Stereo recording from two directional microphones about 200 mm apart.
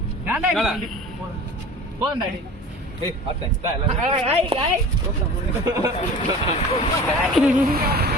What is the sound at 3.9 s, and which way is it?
Speech, 30° right (ahead or behind).